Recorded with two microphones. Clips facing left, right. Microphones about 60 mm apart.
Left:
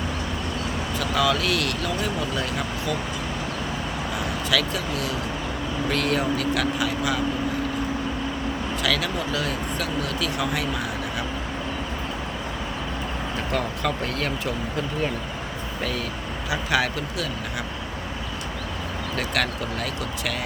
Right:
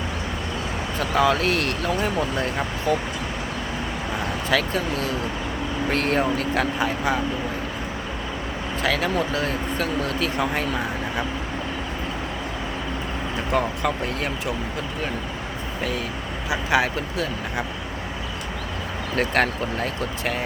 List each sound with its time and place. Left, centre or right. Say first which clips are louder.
0.9 s speech: right 3 dB; right
4.4 s speech: right 3 dB; right
8.8 s speech: right 4 dB; right
13.5 s speech: right 4 dB; right
16.5 s speech: right 2 dB; right
19.1 s speech: right 5 dB; right